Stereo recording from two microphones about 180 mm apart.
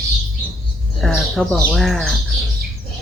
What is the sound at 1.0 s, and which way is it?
Speech, centre (ahead or behind).